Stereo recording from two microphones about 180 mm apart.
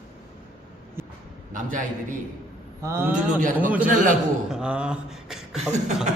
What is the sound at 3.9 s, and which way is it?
Speech, 45° right (ahead or behind).